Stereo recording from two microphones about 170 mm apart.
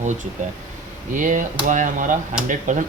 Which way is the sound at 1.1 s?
50° right (ahead or behind).